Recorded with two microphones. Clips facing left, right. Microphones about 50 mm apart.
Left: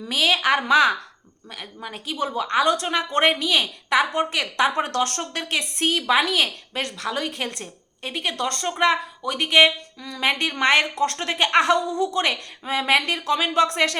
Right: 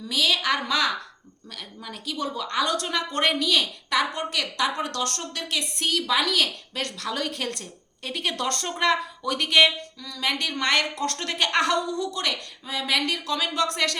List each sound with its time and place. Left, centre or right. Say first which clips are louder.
0.1 s a woman's voice: left 4 dB; left; by 8.3 s centre
8.3 s speech: left 1 dB; centre
8.6 s a woman's voice: left 4 dB; centre
10.0 s a woman's voice: left 5 dB; left